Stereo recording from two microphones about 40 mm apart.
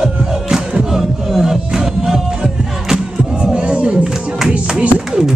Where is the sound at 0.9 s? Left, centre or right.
Centre.